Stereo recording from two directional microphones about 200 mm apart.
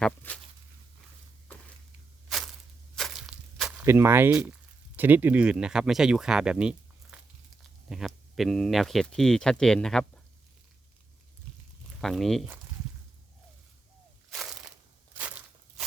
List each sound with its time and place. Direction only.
0.0 s speech: 5° left (ahead or behind)
2.9 s walk: centre (ahead or behind)
4.9 s speech: 10° right (ahead or behind)
11.9 s speech: centre (ahead or behind)
14.3 s crushing: centre (ahead or behind)
15.2 s walk: 5° right (ahead or behind)